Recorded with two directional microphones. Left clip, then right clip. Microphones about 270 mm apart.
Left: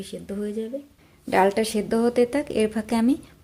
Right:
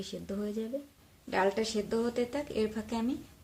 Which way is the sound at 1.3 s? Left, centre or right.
Left.